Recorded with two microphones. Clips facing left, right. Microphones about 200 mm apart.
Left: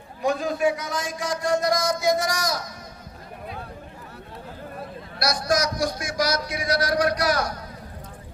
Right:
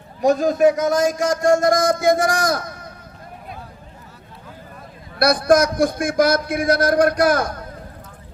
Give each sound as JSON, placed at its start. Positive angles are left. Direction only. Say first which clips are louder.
{"t": 0.2, "sound": "a man's voice", "louder": "right 8 dB", "side_deg": -45}
{"t": 5.2, "sound": "a man's voice", "louder": "right 9 dB", "side_deg": -55}